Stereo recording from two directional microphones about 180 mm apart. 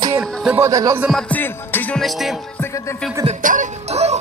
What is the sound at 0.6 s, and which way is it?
Speech, 20° right (ahead or behind).